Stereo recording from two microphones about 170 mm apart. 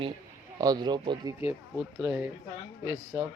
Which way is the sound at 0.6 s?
25° right (ahead or behind).